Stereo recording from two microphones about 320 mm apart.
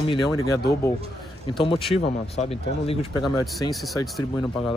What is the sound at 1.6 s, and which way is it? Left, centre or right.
Speech, centre.